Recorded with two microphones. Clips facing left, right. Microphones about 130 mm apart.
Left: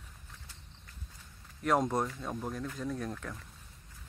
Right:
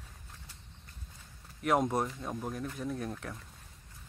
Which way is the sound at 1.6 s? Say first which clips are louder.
Even; 5° right (ahead or behind).